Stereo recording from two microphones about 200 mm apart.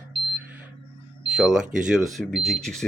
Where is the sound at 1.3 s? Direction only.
5° right (ahead or behind).